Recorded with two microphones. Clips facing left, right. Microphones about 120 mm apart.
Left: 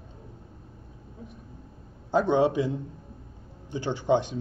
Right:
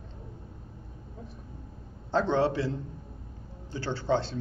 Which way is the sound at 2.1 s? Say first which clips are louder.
Left 3 dB; 15° left (ahead or behind).